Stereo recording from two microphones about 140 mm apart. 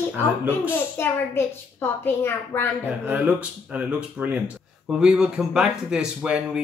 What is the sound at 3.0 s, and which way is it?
Speech, 10° right (ahead or behind).